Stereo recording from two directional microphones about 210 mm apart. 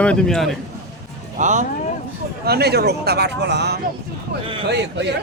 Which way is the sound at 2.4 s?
50° right (ahead or behind).